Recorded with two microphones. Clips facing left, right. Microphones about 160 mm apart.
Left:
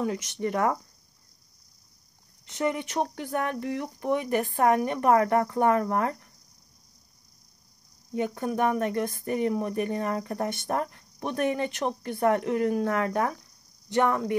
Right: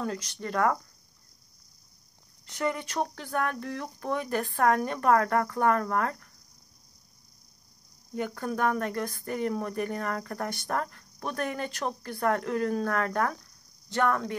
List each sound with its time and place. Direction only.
0.0 s speech: 20° left (ahead or behind)
2.4 s speech: 20° left (ahead or behind)
8.1 s speech: 20° left (ahead or behind)
13.3 s a sound: 15° left (ahead or behind)